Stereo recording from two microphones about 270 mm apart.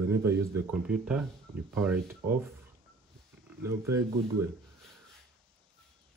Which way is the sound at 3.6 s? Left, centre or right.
Centre.